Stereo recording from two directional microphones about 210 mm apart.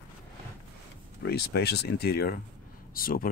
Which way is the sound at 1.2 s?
50° left (ahead or behind).